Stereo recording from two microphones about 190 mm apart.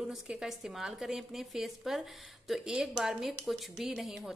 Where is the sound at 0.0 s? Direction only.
Centre (ahead or behind).